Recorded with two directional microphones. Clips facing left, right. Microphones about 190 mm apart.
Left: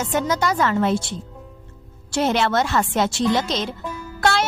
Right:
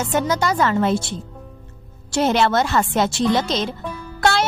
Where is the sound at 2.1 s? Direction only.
35° right (ahead or behind).